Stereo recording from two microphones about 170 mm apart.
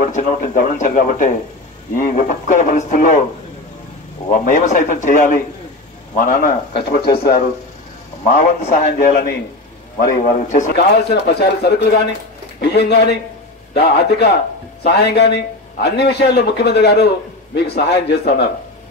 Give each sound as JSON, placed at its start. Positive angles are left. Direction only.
{"t": 0.0, "sound": "speech", "side_deg": 45}
{"t": 4.3, "sound": "speech", "side_deg": 45}
{"t": 8.6, "sound": "speech", "side_deg": 45}
{"t": 10.8, "sound": "a man's voice", "side_deg": 75}